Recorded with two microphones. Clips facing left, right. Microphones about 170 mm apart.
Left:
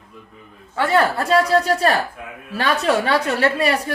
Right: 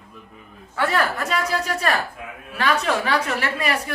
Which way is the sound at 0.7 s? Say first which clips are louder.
Left 4 dB; 30° left (ahead or behind).